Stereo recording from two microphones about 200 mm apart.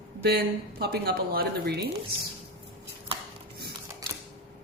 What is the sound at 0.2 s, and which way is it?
A woman's voice, 50° right (ahead or behind).